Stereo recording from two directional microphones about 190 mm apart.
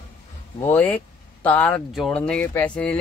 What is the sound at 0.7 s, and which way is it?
Speech, 10° left (ahead or behind).